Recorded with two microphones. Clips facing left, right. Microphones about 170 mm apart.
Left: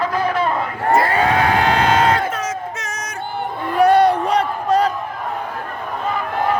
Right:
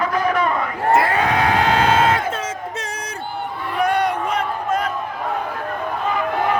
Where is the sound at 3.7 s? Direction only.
35° left (ahead or behind).